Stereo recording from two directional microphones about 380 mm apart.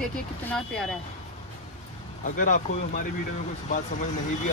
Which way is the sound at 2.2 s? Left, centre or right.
Left.